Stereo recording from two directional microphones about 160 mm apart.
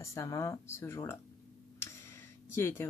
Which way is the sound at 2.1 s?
15° left (ahead or behind).